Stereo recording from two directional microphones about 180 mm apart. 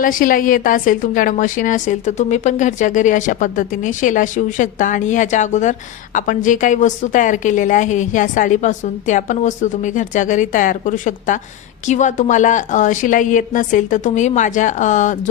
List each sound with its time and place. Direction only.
0.0 s a woman's voice: 50° left (ahead or behind)